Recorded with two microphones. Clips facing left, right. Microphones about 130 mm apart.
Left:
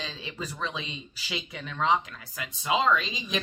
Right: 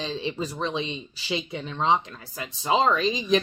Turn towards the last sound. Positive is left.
turn(degrees=-35)  # may be behind; listen again after turning